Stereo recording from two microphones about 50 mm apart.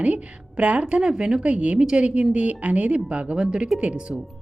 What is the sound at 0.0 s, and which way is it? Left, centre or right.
Speech, right.